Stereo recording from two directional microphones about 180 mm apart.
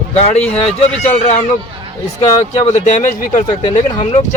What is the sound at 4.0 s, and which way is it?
Speech, 35° left (ahead or behind).